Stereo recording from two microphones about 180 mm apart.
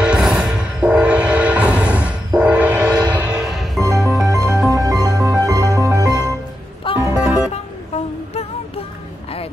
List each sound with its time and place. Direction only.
0.0 s music: 5° right (ahead or behind)
3.8 s music: 15° right (ahead or behind)
6.8 s music: 30° left (ahead or behind)